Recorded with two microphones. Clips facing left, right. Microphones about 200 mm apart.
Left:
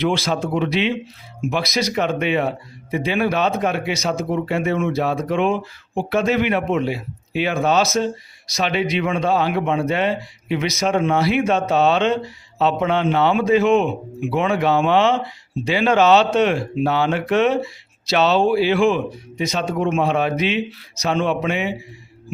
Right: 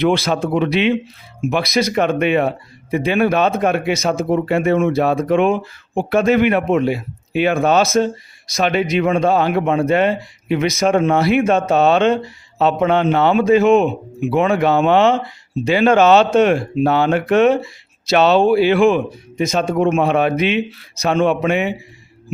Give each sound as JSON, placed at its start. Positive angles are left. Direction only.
{"t": 0.0, "sound": "speech", "side_deg": -60}